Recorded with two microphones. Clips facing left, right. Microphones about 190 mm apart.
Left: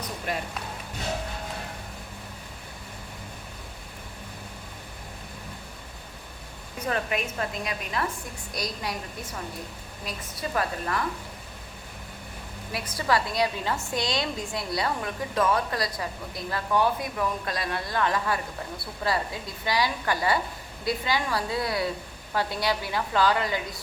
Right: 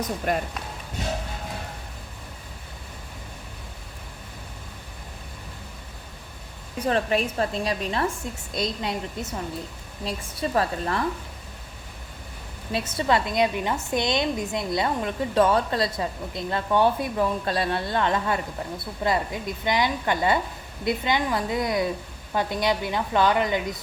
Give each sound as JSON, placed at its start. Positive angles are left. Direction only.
{"t": 0.3, "sound": "speech", "side_deg": -45}
{"t": 6.7, "sound": "a woman's voice", "side_deg": -30}
{"t": 10.0, "sound": "a woman's voice", "side_deg": -30}
{"t": 12.7, "sound": "a woman's voice", "side_deg": -25}